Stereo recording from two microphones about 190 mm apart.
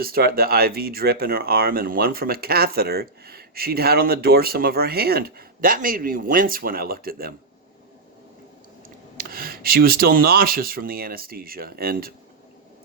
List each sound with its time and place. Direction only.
0.0 s speech: 50° right (ahead or behind)
9.1 s speech: 50° right (ahead or behind)